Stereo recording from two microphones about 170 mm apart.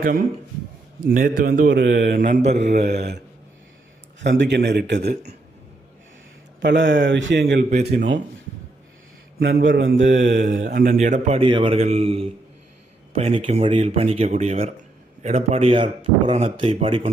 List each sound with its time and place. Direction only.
1.0 s a man's voice: 55° right (ahead or behind); by 2.0 s 85° right
2.0 s a man's voice: 55° right (ahead or behind)
4.2 s a man's voice: 90° right
6.6 s a man's voice: 90° right
9.4 s a man's voice: 70° right (ahead or behind); by 17.1 s 30° right (ahead or behind)